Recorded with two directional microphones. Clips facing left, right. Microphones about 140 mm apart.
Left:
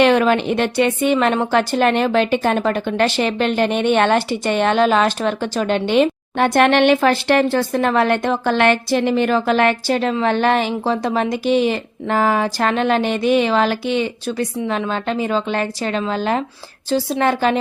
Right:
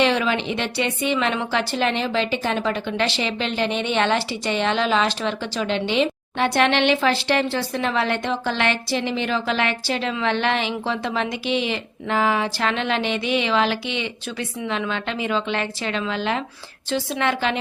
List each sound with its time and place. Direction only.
0.0 s a woman's voice: 50° left (ahead or behind)